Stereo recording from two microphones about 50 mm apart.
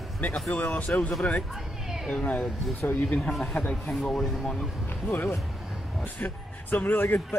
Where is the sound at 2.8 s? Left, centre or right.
Left.